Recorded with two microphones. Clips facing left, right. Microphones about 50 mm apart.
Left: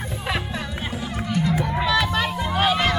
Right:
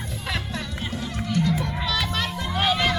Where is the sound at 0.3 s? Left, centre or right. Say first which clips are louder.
Left 3 dB; centre.